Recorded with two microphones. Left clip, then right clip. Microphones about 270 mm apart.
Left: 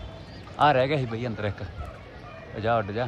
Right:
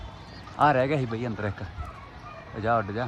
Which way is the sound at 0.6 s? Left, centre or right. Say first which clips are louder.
Left 1 dB; right.